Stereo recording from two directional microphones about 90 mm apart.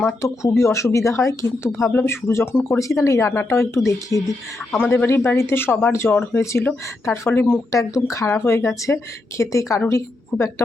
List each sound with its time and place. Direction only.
0.2 s speech: 35° left (ahead or behind)
1.9 s speech: 25° left (ahead or behind)
5.0 s speech: 25° left (ahead or behind)
7.7 s a woman's voice: 40° left (ahead or behind)